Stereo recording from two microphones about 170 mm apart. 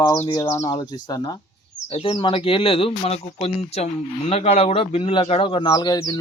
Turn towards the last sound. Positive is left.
turn(degrees=25)  # may be behind; listen again after turning